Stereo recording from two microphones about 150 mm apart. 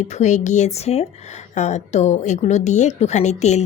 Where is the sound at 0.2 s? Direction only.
55° left (ahead or behind).